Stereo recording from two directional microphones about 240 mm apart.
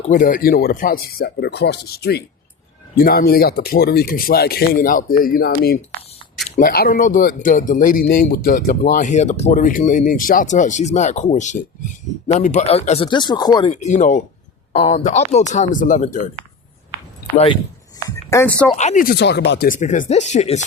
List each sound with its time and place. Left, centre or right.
0.1 s speech: left; by 13.7 s centre
13.8 s speech: left
17.3 s speech: left
18.3 s speech: centre
18.8 s speech: left